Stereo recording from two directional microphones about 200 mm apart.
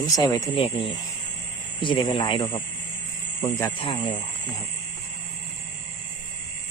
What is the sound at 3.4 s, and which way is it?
Speech, 10° left (ahead or behind).